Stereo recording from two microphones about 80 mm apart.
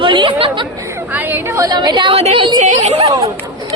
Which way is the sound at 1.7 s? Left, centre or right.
Right.